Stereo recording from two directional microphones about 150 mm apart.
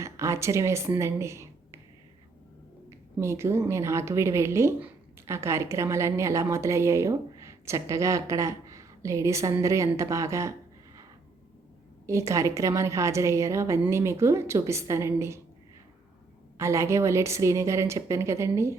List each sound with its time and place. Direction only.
0.0 s speech: 20° right (ahead or behind)
3.2 s a woman's voice: 20° right (ahead or behind)
12.0 s a woman's voice: 20° right (ahead or behind)
16.6 s a woman's voice: 20° right (ahead or behind)